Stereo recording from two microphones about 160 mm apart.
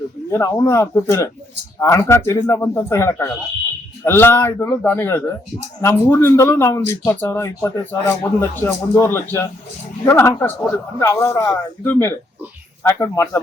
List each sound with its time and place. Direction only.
0.3 s speech: 20° left (ahead or behind)